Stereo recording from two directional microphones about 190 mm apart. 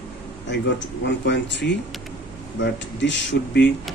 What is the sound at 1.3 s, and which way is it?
Speech, 65° left (ahead or behind).